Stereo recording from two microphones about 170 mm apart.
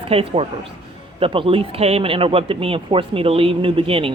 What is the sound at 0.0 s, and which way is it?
Speech, 35° right (ahead or behind).